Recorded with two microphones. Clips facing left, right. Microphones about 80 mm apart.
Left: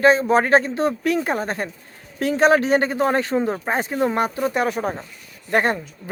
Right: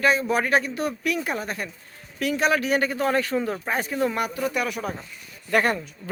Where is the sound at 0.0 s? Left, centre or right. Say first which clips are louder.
Left 6 dB; left.